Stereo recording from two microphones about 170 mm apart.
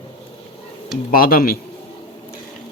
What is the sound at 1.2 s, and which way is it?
Speech, 60° left (ahead or behind).